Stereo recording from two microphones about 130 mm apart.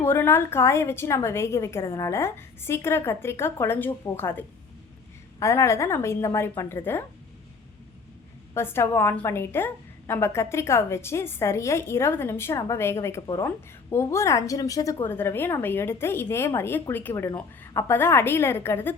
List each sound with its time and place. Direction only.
0.0 s a woman's voice: 20° left (ahead or behind)
8.5 s a woman's voice: 20° left (ahead or behind)